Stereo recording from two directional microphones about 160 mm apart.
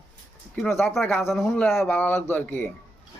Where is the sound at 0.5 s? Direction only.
Centre (ahead or behind).